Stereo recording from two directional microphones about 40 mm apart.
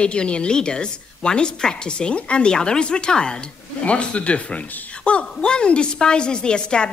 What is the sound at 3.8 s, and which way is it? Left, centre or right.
A woman's voice, left.